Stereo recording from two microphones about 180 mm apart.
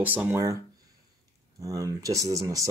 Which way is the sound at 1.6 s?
20° right (ahead or behind).